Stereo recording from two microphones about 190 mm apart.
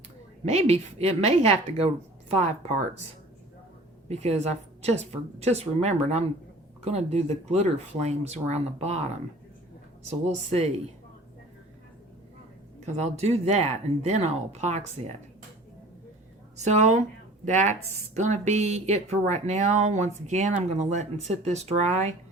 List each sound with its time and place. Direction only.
0.4 s speech: 35° right (ahead or behind)
4.1 s speech: 35° right (ahead or behind)
10.1 s speech: 35° right (ahead or behind)
12.8 s speech: 35° right (ahead or behind)
16.6 s speech: 35° right (ahead or behind)